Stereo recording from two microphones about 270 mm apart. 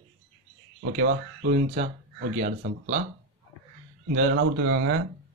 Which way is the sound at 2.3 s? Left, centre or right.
Right.